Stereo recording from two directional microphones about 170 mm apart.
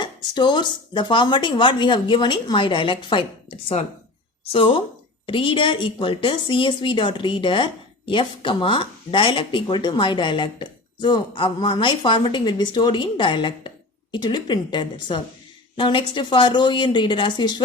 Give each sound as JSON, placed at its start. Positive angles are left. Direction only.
{"t": 0.0, "sound": "speech", "side_deg": 25}
{"t": 4.5, "sound": "speech", "side_deg": 30}